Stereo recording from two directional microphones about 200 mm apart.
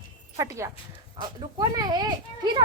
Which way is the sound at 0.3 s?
15° right (ahead or behind).